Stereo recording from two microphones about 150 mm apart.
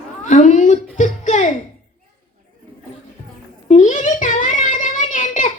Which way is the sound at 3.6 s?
55° left (ahead or behind).